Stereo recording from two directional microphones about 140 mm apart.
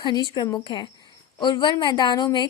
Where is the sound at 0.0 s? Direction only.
30° left (ahead or behind).